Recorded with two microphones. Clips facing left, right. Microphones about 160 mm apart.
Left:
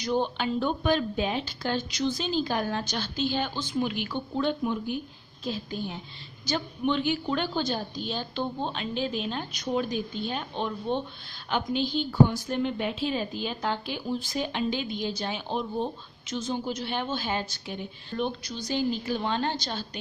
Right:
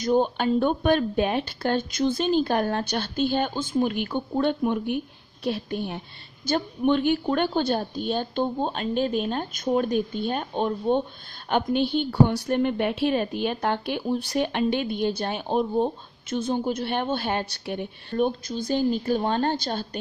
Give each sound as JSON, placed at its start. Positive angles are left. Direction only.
{"t": 0.0, "sound": "a woman's voice", "side_deg": -50}
{"t": 6.4, "sound": "a woman's voice", "side_deg": -50}
{"t": 11.5, "sound": "a woman's voice", "side_deg": -60}